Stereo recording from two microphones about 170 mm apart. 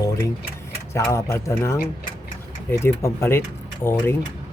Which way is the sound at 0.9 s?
15° left (ahead or behind).